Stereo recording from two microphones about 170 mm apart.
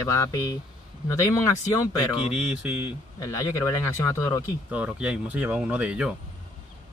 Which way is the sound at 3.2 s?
20° left (ahead or behind).